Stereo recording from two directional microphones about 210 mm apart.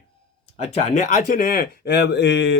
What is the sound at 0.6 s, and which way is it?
Speech, 35° left (ahead or behind).